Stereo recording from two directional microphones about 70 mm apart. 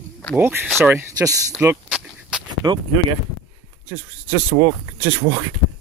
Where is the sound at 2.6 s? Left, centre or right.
Right.